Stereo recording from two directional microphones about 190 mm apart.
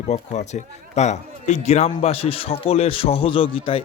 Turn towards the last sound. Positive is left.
turn(degrees=25)  # may be behind; listen again after turning